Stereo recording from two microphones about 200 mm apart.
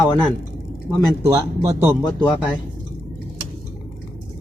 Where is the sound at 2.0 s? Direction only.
20° left (ahead or behind).